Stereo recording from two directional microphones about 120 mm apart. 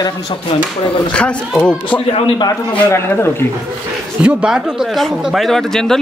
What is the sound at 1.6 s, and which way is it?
Speech, 10° left (ahead or behind).